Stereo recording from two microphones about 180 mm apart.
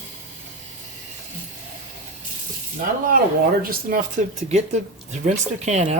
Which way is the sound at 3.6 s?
50° right (ahead or behind).